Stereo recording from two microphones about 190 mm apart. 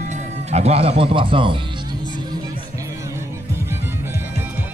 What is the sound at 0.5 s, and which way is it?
Speech, 35° right (ahead or behind).